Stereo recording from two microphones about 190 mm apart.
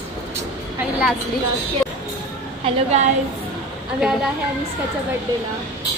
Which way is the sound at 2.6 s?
35° right (ahead or behind).